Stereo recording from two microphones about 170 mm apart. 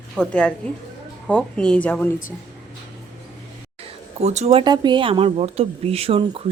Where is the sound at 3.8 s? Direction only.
40° right (ahead or behind).